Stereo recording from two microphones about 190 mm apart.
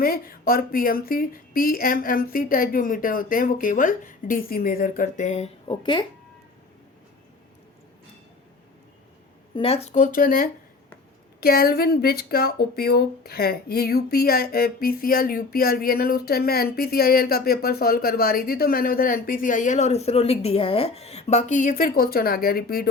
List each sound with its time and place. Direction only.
0.0 s speech: 50° left (ahead or behind); by 6.1 s 25° left (ahead or behind)
9.6 s speech: 30° left (ahead or behind); by 22.9 s 55° left (ahead or behind)